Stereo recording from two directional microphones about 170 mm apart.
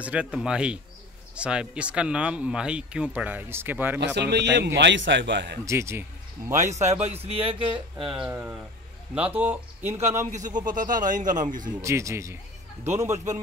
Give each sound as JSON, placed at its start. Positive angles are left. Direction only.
{"t": 0.0, "sound": "speech", "side_deg": -5}
{"t": 4.0, "sound": "a man's voice", "side_deg": -85}
{"t": 5.7, "sound": "a man's voice", "side_deg": -15}
{"t": 6.5, "sound": "a man's voice", "side_deg": -45}
{"t": 8.3, "sound": "speech", "side_deg": -10}
{"t": 10.3, "sound": "a man's voice", "side_deg": -50}
{"t": 11.8, "sound": "speech", "side_deg": -15}